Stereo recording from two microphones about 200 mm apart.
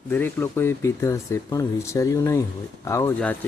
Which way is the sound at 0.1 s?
10° left (ahead or behind).